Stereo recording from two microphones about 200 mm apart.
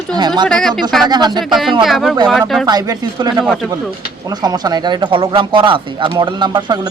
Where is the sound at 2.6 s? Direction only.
20° right (ahead or behind).